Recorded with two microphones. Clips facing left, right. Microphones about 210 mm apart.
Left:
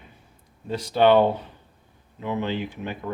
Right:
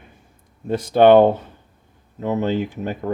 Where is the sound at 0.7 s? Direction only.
50° right (ahead or behind).